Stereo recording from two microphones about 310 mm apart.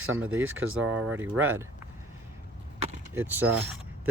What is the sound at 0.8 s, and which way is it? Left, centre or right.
Speech, centre.